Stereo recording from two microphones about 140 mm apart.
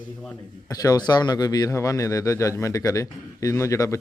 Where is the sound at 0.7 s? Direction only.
25° left (ahead or behind).